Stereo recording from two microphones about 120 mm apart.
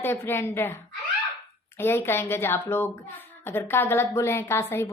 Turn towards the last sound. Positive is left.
turn(degrees=20)  # may be behind; listen again after turning